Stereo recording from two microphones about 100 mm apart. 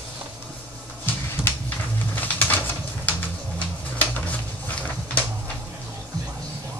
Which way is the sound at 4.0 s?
15° left (ahead or behind).